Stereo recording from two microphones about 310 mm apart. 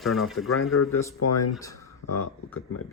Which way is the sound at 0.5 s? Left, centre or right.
Left.